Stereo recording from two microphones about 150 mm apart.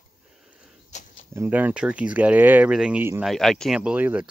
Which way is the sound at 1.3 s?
10° right (ahead or behind).